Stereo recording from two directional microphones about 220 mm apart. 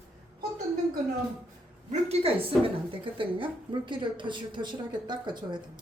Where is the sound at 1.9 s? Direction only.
30° right (ahead or behind).